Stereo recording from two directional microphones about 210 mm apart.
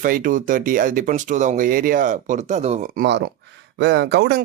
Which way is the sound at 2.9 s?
55° right (ahead or behind).